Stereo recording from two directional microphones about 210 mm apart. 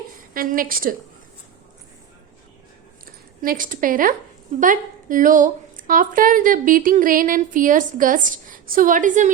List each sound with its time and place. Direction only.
0.3 s a woman's voice: 40° right (ahead or behind)
3.4 s a woman's voice: 40° right (ahead or behind)